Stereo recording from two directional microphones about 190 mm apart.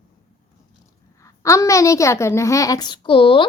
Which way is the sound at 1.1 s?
15° left (ahead or behind).